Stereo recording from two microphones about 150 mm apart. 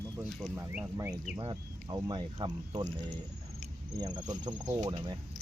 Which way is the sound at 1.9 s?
30° right (ahead or behind).